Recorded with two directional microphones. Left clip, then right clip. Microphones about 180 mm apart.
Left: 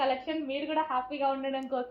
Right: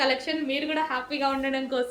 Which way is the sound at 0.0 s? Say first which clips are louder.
Right 4 dB; 30° right (ahead or behind).